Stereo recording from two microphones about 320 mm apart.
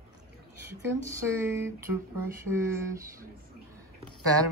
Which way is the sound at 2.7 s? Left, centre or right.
Centre.